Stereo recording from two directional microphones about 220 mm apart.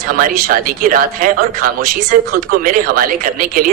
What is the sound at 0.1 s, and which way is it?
Speech, 40° right (ahead or behind).